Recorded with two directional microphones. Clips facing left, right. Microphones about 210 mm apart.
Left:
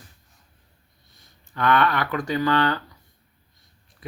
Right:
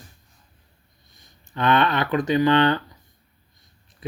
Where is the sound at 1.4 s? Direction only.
20° right (ahead or behind).